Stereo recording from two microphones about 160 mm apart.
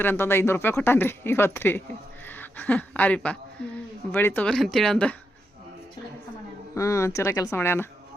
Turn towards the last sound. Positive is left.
turn(degrees=15)  # may be behind; listen again after turning